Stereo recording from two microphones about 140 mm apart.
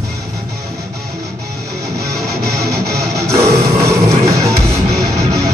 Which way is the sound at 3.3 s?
20° right (ahead or behind).